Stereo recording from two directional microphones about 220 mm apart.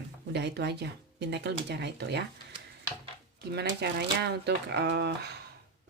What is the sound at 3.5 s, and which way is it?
Speech, 50° right (ahead or behind).